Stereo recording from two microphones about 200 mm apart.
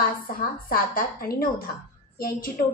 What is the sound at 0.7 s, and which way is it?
A woman's voice, 45° left (ahead or behind).